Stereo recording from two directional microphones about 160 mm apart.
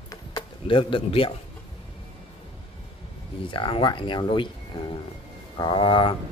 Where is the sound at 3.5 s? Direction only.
30° left (ahead or behind).